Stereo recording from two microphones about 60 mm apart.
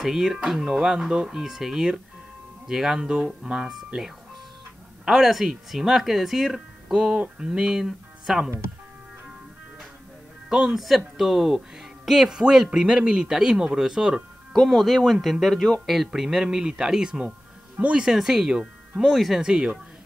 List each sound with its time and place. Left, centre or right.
0.0 s speech: centre
10.5 s speech: centre
14.5 s speech: centre
17.7 s speech: right
18.0 s speech: centre
19.4 s speech: centre